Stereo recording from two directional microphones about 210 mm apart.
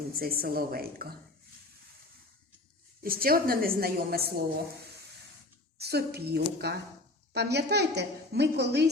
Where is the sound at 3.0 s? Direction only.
45° right (ahead or behind).